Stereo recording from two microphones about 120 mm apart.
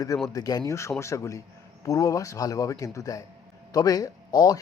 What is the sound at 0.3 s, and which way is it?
A man's voice, 30° left (ahead or behind).